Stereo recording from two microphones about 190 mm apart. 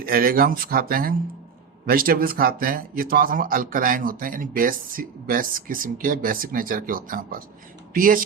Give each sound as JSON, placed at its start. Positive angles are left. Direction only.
{"t": 0.0, "sound": "speech", "side_deg": -50}